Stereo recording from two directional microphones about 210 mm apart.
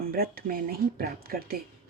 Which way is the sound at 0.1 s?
45° right (ahead or behind).